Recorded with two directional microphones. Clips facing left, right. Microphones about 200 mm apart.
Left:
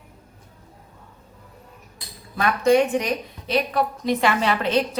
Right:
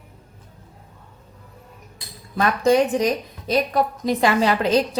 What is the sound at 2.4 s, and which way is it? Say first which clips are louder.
A woman's voice: even; 40° right (ahead or behind).